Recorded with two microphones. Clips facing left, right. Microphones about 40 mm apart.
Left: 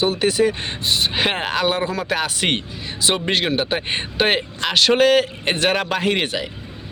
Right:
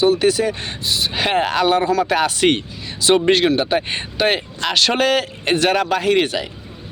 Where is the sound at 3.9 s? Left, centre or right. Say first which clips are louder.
Even; left.